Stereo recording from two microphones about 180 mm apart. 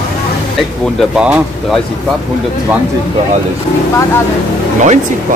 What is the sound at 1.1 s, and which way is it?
Speech, 5° right (ahead or behind).